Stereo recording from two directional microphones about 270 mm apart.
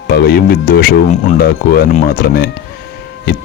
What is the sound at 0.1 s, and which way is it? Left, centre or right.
Speech, left.